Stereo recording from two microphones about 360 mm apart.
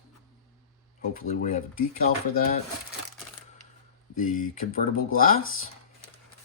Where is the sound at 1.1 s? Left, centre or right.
Left.